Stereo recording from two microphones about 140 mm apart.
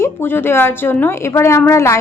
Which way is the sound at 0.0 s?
15° left (ahead or behind).